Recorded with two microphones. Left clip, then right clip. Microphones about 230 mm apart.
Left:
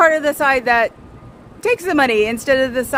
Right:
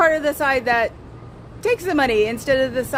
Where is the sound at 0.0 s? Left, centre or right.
Left.